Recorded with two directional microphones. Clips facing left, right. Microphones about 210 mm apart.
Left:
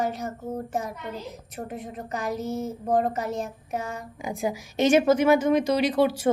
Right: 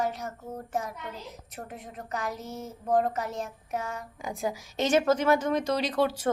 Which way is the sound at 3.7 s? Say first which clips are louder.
Left 1 dB; 30° left (ahead or behind).